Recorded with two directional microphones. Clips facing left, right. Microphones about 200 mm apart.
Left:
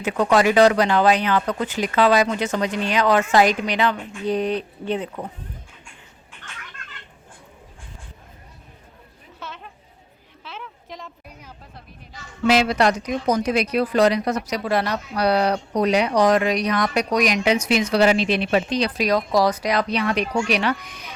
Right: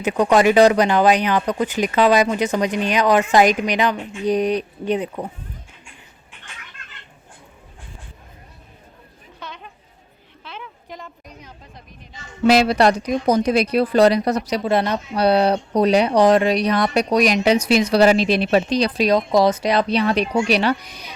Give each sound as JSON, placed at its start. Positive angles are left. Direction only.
{"t": 0.0, "sound": "speech", "side_deg": -15}
{"t": 9.4, "sound": "a sound", "side_deg": 0}
{"t": 12.4, "sound": "a woman's voice", "side_deg": -40}